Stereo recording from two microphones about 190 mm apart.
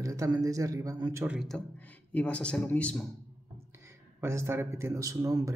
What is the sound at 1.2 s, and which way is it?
Speech, 5° right (ahead or behind).